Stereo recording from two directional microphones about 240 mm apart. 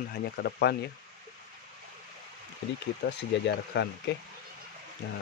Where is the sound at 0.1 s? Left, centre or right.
Left.